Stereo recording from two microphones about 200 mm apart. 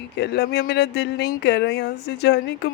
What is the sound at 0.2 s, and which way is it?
Speech, 55° left (ahead or behind).